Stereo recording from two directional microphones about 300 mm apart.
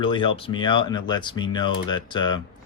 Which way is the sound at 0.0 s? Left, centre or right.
Centre.